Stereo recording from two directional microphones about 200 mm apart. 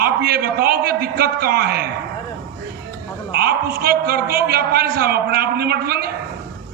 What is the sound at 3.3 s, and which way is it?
A man's voice, 50° right (ahead or behind).